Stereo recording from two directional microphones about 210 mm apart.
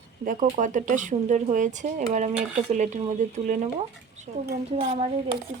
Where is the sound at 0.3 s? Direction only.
35° right (ahead or behind).